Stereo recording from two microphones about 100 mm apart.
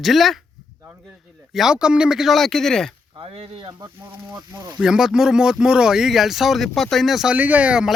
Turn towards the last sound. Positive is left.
turn(degrees=-10)  # may be behind; listen again after turning